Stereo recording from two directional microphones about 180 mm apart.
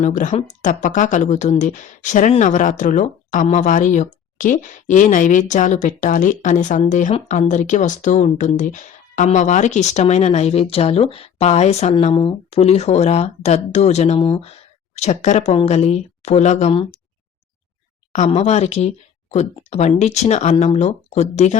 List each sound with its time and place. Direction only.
0.0 s speech: 45° left (ahead or behind); by 14.4 s 30° left (ahead or behind)
14.9 s speech: 40° left (ahead or behind)
18.1 s speech: 40° left (ahead or behind)